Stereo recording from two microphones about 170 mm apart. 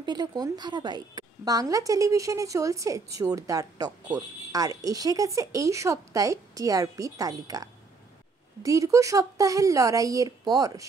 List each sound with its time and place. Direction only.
0.0 s a woman's voice: 25° right (ahead or behind)